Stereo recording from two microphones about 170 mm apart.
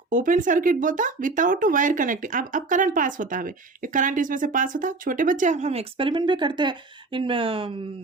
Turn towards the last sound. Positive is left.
turn(degrees=-30)  # may be behind; listen again after turning